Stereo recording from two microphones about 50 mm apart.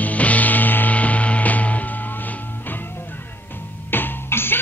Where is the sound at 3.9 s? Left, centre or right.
Left.